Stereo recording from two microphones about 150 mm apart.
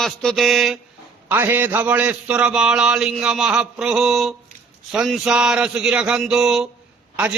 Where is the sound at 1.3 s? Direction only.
15° right (ahead or behind).